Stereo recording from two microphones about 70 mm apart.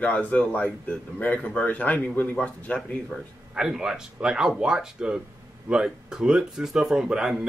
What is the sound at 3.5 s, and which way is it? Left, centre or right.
Speech, centre.